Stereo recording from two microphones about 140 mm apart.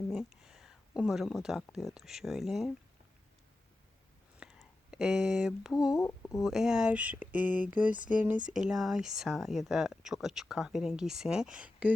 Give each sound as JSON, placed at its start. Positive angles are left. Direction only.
{"t": 0.1, "sound": "speech", "side_deg": -5}
{"t": 4.4, "sound": "a sound", "side_deg": -5}
{"t": 5.9, "sound": "speech", "side_deg": 20}
{"t": 6.4, "sound": "speech", "side_deg": -5}